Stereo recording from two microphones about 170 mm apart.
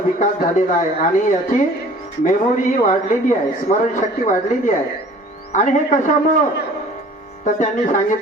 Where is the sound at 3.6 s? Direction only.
45° left (ahead or behind).